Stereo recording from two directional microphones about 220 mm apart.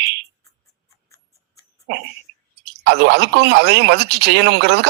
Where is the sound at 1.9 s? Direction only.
50° right (ahead or behind).